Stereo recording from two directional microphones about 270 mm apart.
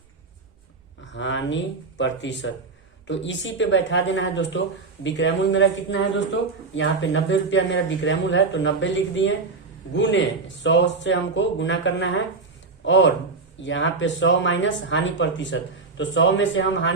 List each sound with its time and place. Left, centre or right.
1.1 s a man's voice: left